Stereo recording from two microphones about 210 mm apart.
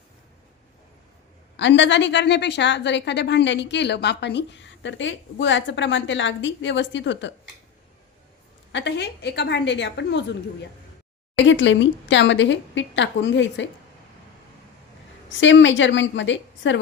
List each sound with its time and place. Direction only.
1.5 s a woman's voice: 60° left (ahead or behind)
8.7 s a woman's voice: 55° left (ahead or behind)
11.3 s a woman's voice: 60° left (ahead or behind)
15.3 s a woman's voice: 60° left (ahead or behind)